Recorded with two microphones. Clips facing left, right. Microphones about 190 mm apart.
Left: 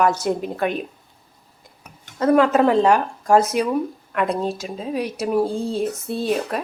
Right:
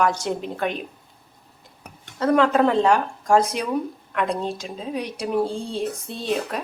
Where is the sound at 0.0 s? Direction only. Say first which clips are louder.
Left 3 dB; 5° left (ahead or behind).